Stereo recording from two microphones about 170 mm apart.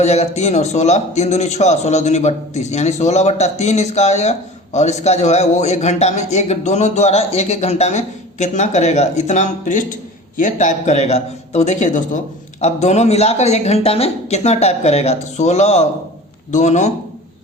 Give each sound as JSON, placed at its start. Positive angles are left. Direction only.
{"t": 0.0, "sound": "a man's voice", "side_deg": 40}